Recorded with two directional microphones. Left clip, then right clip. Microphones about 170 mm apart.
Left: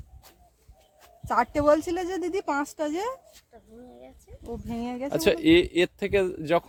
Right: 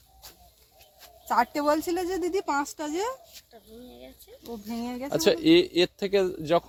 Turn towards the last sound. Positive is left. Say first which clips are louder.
# even
turn(degrees=5)  # may be behind; listen again after turning